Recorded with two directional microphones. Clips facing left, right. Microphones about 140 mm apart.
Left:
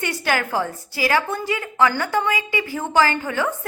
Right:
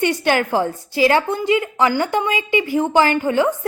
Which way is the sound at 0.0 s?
20° right (ahead or behind).